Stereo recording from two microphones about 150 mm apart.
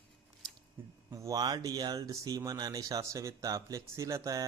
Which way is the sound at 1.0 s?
25° right (ahead or behind).